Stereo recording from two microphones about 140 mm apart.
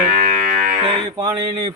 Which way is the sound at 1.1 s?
25° right (ahead or behind).